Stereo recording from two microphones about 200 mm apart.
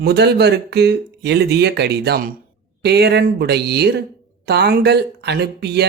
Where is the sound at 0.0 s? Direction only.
55° right (ahead or behind).